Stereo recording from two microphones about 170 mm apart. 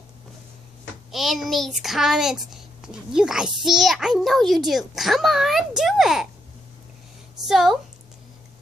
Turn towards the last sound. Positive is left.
turn(degrees=0)  # may be behind; listen again after turning